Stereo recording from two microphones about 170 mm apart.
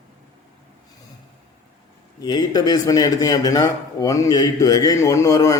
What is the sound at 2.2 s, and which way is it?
Speech, 25° left (ahead or behind).